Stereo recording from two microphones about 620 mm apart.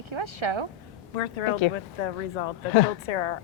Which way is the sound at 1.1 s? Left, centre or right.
Left.